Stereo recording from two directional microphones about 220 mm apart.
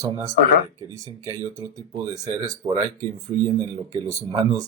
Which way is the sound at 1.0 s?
15° right (ahead or behind).